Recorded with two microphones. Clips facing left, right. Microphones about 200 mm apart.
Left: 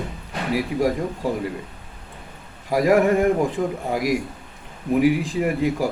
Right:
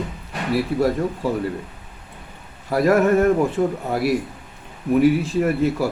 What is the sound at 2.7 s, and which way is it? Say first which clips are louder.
Speech: right 1 dB; 15° left (ahead or behind).